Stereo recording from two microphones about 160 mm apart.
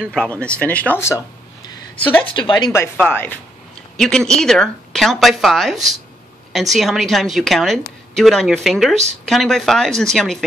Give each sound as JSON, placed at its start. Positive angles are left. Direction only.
{"t": 0.0, "sound": "speech", "side_deg": 5}
{"t": 2.2, "sound": "a woman's voice", "side_deg": 30}